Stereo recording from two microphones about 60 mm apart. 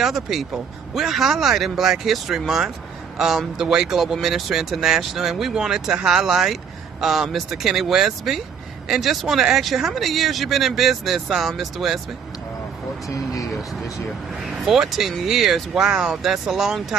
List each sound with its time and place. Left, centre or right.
0.0 s speech: centre
13.1 s speech: left
14.4 s speech: centre